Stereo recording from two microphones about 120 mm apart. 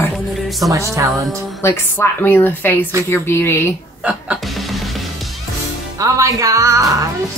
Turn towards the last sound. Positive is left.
turn(degrees=-25)  # may be behind; listen again after turning